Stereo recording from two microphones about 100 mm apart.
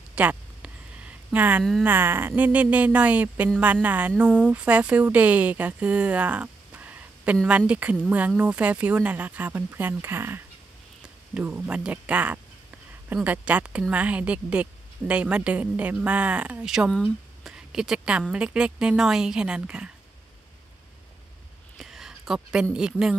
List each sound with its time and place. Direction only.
0.1 s a sound: 15° right (ahead or behind)
1.6 s speech: 5° left (ahead or behind)
1.9 s speech: 20° right (ahead or behind)
21.7 s speech: centre (ahead or behind)